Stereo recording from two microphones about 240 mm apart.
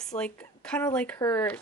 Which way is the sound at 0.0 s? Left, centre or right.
Centre.